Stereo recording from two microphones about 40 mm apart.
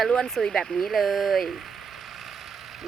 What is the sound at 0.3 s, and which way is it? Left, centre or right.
Speech, centre.